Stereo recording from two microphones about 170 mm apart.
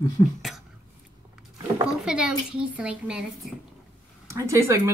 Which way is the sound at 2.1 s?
5° right (ahead or behind).